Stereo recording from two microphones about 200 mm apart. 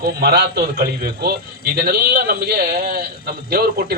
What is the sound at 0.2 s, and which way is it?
A man's voice, 50° right (ahead or behind).